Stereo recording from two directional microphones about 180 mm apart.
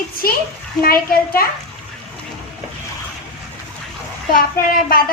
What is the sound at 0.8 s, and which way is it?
Speech, 55° left (ahead or behind).